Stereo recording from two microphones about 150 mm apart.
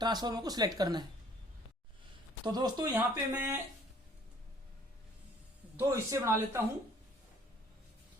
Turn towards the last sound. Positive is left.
turn(degrees=-20)  # may be behind; listen again after turning